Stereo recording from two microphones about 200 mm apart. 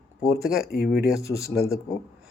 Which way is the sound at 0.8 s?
50° left (ahead or behind).